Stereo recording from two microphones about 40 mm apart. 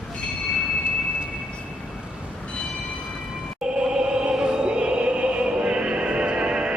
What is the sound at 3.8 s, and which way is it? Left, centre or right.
Music, right.